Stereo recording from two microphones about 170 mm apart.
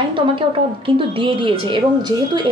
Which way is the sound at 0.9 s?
30° right (ahead or behind).